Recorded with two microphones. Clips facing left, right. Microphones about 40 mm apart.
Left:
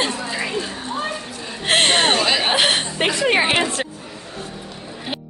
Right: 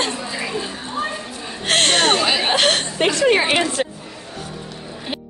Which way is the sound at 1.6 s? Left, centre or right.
Centre.